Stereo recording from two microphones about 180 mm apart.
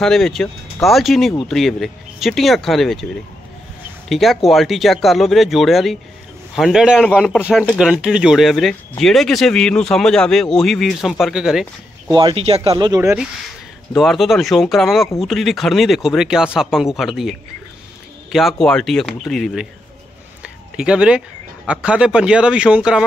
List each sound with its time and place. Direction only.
0.0 s speech: centre (ahead or behind)
4.1 s speech: centre (ahead or behind)
7.9 s speech: 5° right (ahead or behind)
12.1 s speech: 25° right (ahead or behind)
13.9 s speech: centre (ahead or behind)
20.4 s a sound: 5° right (ahead or behind)
21.6 s speech: 5° right (ahead or behind)